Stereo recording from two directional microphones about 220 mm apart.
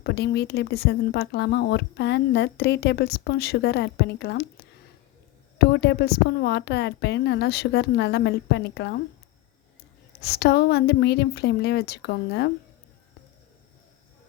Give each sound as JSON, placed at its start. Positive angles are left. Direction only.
{"t": 0.0, "sound": "speech", "side_deg": 50}
{"t": 5.5, "sound": "speech", "side_deg": 50}
{"t": 10.2, "sound": "speech", "side_deg": 45}